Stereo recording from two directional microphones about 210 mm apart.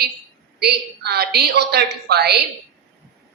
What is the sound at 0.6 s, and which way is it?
A woman's voice, 50° right (ahead or behind).